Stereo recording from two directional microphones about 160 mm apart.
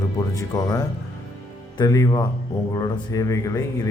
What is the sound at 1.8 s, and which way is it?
A man's voice, 20° left (ahead or behind).